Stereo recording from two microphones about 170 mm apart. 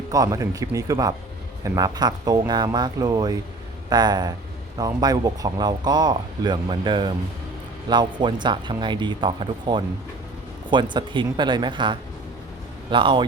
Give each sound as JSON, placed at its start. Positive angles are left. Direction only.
{"t": 0.1, "sound": "speech", "side_deg": -20}